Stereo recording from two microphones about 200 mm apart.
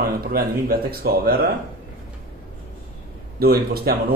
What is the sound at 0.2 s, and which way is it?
Speech, 50° right (ahead or behind).